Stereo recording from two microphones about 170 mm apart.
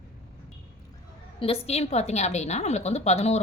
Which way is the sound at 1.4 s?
35° left (ahead or behind).